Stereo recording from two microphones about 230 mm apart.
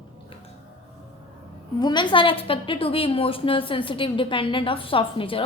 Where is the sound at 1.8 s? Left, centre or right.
Centre.